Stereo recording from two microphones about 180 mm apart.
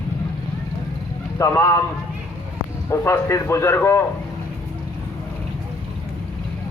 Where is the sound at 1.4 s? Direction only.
15° left (ahead or behind).